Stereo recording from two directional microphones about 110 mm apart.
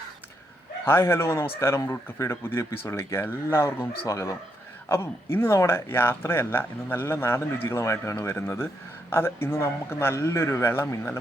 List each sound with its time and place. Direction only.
0.9 s speech: 25° left (ahead or behind)